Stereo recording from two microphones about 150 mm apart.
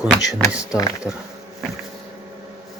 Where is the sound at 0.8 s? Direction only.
20° left (ahead or behind).